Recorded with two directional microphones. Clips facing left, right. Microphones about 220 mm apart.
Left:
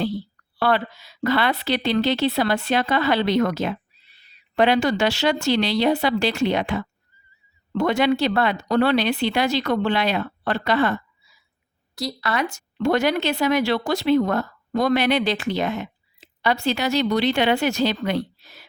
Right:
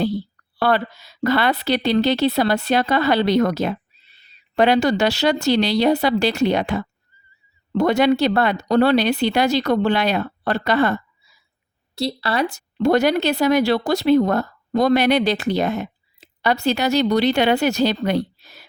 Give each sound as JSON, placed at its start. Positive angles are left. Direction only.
{"t": 0.6, "sound": "speech", "side_deg": -40}
{"t": 4.0, "sound": "owl", "side_deg": -25}
{"t": 4.5, "sound": "speech", "side_deg": -40}
{"t": 11.9, "sound": "speech", "side_deg": -30}